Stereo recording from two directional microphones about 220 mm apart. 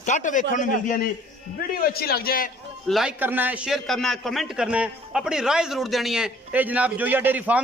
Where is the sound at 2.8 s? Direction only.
Centre (ahead or behind).